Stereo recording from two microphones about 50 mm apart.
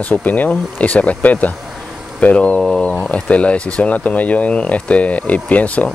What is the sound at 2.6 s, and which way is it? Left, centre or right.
Speech, centre.